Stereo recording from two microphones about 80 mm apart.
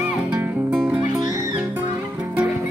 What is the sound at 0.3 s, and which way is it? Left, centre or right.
Music, centre.